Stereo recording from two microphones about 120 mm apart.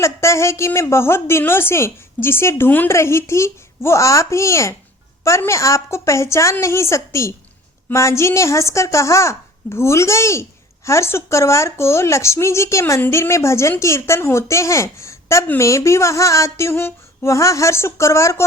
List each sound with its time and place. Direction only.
0.0 s speech: 25° left (ahead or behind)